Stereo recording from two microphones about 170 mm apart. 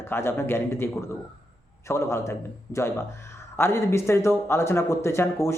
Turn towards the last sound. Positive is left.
turn(degrees=15)  # may be behind; listen again after turning